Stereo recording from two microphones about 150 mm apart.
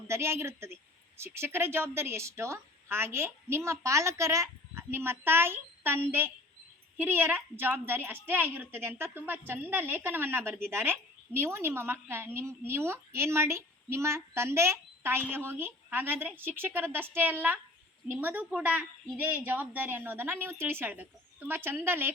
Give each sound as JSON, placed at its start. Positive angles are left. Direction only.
{"t": 0.1, "sound": "a woman's voice", "side_deg": -15}